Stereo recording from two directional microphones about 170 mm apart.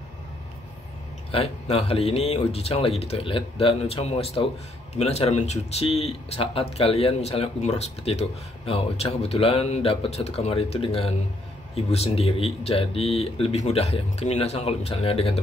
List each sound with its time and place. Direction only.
1.3 s speech: 35° left (ahead or behind)